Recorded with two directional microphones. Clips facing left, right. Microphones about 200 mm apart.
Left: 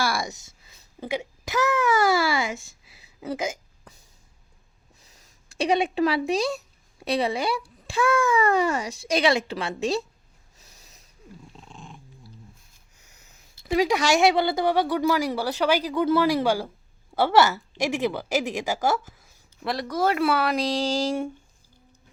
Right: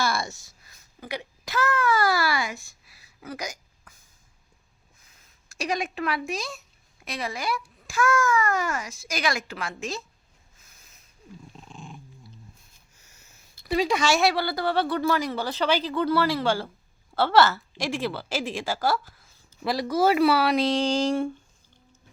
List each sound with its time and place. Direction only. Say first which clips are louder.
0.0 s a woman's voice: left 1 dB; 10° left (ahead or behind)
5.5 s a child's voice: left 7 dB; 30° left (ahead or behind)
11.5 s dog: right 2 dB; 5° right (ahead or behind)
13.0 s a woman's voice: left 2 dB; 15° left (ahead or behind)
19.6 s speech: right 2 dB; centre (ahead or behind)